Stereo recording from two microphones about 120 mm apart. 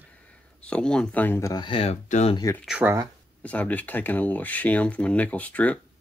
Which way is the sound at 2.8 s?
20° right (ahead or behind).